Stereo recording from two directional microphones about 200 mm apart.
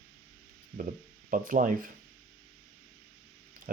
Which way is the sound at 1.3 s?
40° right (ahead or behind).